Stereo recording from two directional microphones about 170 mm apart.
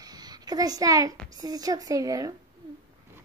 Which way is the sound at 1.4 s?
20° right (ahead or behind).